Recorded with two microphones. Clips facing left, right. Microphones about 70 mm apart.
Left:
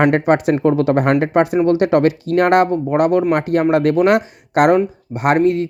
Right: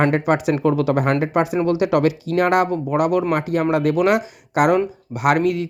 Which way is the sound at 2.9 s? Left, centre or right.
Left.